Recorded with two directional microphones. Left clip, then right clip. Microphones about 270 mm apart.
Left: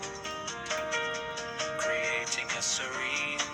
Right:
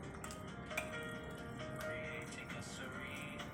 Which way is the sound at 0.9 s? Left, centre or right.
Left.